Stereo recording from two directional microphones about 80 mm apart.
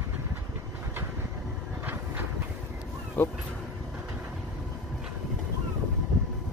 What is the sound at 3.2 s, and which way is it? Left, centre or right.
Speech, left.